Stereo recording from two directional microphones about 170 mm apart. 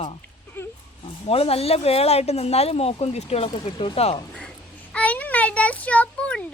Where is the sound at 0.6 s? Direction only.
10° left (ahead or behind).